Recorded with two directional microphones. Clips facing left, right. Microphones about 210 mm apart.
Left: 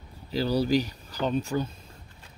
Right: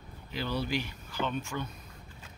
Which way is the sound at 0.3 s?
35° left (ahead or behind).